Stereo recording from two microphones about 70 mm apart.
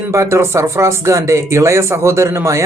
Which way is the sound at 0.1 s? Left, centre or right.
Right.